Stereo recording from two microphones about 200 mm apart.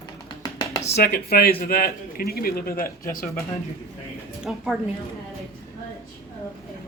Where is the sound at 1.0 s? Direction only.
50° left (ahead or behind).